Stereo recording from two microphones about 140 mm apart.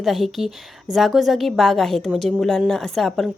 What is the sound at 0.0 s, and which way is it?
Speech, centre (ahead or behind).